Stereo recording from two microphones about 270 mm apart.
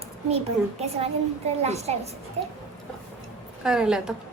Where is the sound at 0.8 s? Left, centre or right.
Right.